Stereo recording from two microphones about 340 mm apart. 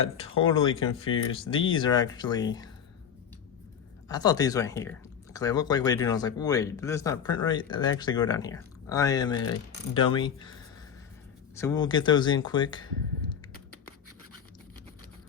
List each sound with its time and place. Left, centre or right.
0.0 s speech: centre
4.1 s speech: centre
11.5 s speech: centre